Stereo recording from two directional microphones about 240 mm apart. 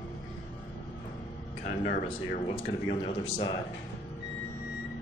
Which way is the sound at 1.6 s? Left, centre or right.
Left.